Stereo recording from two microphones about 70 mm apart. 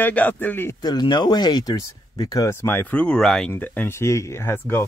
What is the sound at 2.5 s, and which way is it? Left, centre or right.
Speech, left.